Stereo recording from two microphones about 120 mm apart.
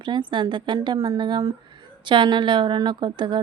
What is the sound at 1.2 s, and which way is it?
Speech, 40° right (ahead or behind).